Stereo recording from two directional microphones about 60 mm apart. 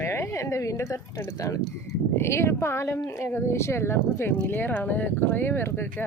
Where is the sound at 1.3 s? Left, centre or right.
Left.